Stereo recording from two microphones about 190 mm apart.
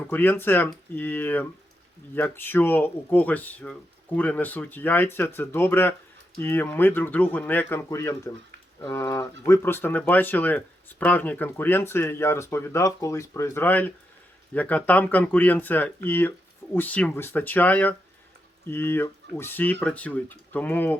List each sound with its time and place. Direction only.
0.1 s speech: 10° left (ahead or behind)